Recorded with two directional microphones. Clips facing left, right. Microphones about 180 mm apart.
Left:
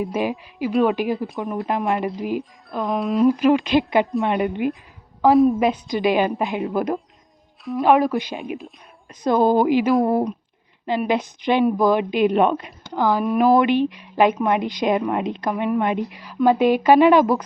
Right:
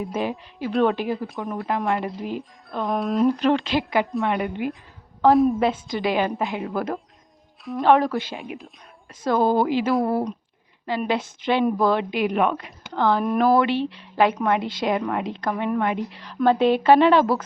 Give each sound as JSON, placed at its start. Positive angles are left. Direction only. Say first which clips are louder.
{"t": 0.0, "sound": "a woman's voice", "louder": "left 3 dB", "side_deg": 15}
{"t": 2.4, "sound": "speech", "louder": "left 2 dB", "side_deg": 0}
{"t": 3.2, "sound": "a woman's voice", "louder": "left 6 dB", "side_deg": 10}
{"t": 5.2, "sound": "speech", "louder": "left 2 dB", "side_deg": 0}
{"t": 5.5, "sound": "a woman's voice", "louder": "left 2 dB", "side_deg": 15}
{"t": 13.5, "sound": "a woman's voice", "louder": "left 3 dB", "side_deg": 15}